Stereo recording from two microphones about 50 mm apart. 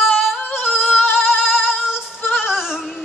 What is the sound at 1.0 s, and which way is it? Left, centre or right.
Singing, left.